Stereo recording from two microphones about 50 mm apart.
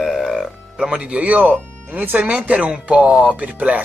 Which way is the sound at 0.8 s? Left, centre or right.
Centre.